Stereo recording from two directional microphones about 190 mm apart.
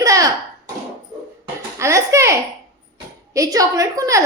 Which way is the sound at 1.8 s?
15° right (ahead or behind).